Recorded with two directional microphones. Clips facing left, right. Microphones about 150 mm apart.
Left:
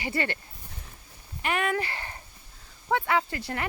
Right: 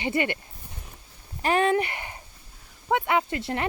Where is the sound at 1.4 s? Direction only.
30° right (ahead or behind).